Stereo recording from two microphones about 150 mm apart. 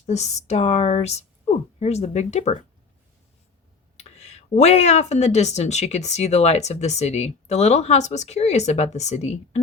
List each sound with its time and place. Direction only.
0.0 s speech: 50° left (ahead or behind)
3.9 s speech: 45° left (ahead or behind)